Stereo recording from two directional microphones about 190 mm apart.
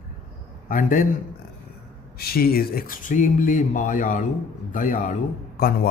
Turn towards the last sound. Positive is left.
turn(degrees=45)  # may be behind; listen again after turning